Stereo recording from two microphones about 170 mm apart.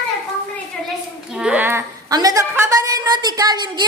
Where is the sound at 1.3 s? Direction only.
5° right (ahead or behind); by 3.8 s 25° right (ahead or behind).